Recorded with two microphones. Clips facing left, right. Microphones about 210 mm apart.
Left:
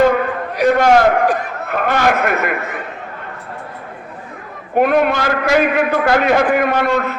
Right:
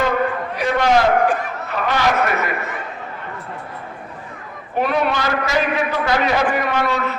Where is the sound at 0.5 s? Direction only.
45° left (ahead or behind).